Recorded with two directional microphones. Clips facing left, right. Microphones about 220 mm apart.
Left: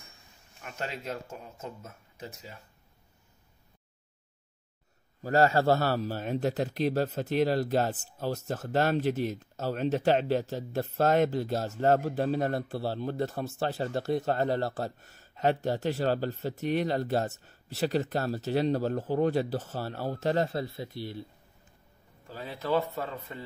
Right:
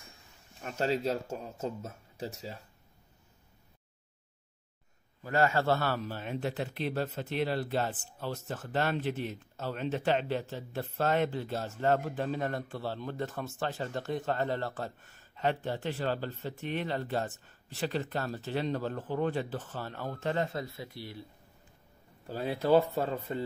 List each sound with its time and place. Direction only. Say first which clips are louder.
0.6 s speech: right 7 dB; 35° right (ahead or behind)
5.2 s a man's voice: left 4 dB; 40° left (ahead or behind)
22.2 s speech: right 5 dB; 35° right (ahead or behind)